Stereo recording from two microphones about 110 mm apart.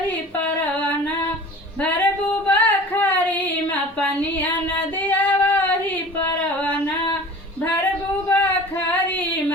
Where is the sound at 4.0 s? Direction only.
15° left (ahead or behind).